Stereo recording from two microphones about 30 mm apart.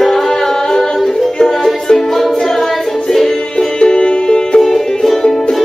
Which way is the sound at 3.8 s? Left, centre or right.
Left.